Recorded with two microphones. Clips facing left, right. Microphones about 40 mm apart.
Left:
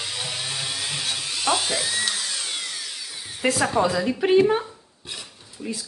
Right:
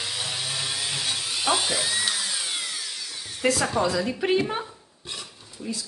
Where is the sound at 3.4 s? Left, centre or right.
Centre.